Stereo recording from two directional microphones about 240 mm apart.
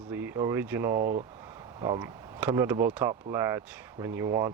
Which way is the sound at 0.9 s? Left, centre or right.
Right.